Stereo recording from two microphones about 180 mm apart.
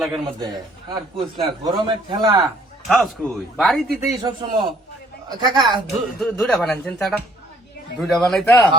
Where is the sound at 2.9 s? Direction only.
Centre (ahead or behind).